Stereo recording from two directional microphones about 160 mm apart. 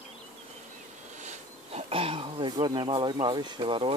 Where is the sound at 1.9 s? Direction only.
35° right (ahead or behind).